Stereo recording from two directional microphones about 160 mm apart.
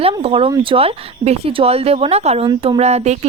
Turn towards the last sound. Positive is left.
turn(degrees=-45)  # may be behind; listen again after turning